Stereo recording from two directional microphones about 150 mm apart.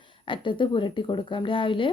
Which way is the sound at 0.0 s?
35° left (ahead or behind).